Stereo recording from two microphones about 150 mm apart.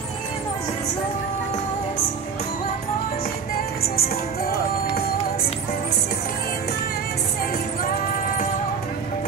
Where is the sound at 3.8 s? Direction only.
90° left.